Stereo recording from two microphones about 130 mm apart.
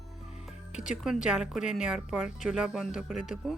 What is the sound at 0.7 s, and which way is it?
Speech, 75° left (ahead or behind).